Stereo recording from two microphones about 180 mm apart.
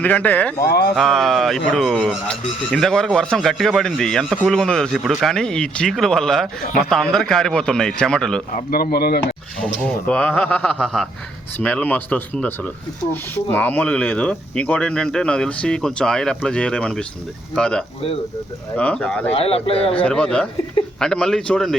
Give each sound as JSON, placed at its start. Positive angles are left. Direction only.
{"t": 0.0, "sound": "speech", "side_deg": 10}
{"t": 0.6, "sound": "speech", "side_deg": 60}
{"t": 0.9, "sound": "speech", "side_deg": 0}
{"t": 8.5, "sound": "speech", "side_deg": 55}
{"t": 9.6, "sound": "speech", "side_deg": 5}
{"t": 19.3, "sound": "speech", "side_deg": 35}
{"t": 20.0, "sound": "speech", "side_deg": 5}